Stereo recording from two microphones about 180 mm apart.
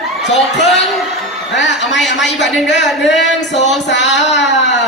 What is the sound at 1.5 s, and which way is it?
Speech, 80° left.